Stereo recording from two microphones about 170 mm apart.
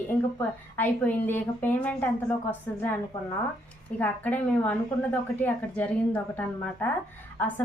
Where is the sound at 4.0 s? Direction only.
10° left (ahead or behind).